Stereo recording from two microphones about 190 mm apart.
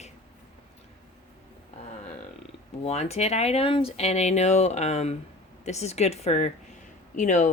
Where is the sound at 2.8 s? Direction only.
35° left (ahead or behind).